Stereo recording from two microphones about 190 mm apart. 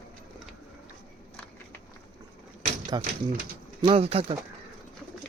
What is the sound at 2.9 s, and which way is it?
Speech, 25° right (ahead or behind).